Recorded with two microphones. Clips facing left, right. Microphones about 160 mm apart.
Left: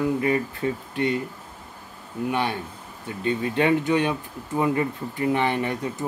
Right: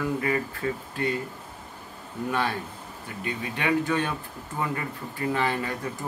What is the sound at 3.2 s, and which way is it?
Speech, 30° left (ahead or behind).